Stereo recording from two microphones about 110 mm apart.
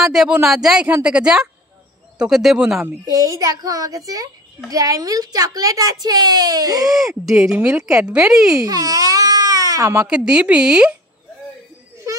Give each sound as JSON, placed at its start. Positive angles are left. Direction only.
{"t": 0.0, "sound": "speech", "side_deg": -5}
{"t": 3.1, "sound": "a woman's voice", "side_deg": -30}
{"t": 6.9, "sound": "speech", "side_deg": -5}
{"t": 8.6, "sound": "baby cry", "side_deg": -35}
{"t": 10.0, "sound": "speech", "side_deg": -10}